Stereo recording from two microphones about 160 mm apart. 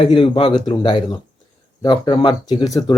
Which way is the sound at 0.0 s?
30° left (ahead or behind).